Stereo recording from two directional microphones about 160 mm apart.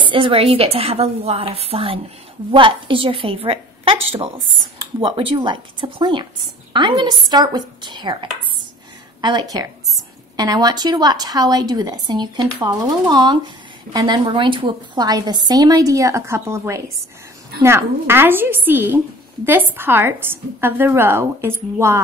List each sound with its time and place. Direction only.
0.0 s a woman's voice: 30° right (ahead or behind); by 22.0 s 15° right (ahead or behind)